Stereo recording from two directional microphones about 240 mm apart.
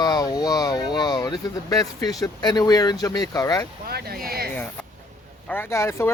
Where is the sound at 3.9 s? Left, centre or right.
Right.